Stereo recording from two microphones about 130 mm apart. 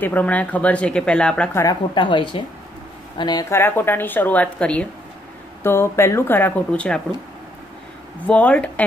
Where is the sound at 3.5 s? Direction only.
15° left (ahead or behind).